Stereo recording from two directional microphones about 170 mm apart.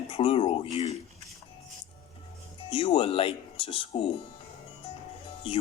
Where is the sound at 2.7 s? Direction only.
30° left (ahead or behind).